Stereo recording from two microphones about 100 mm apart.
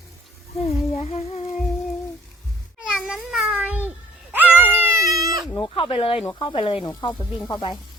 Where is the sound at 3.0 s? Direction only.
Centre (ahead or behind).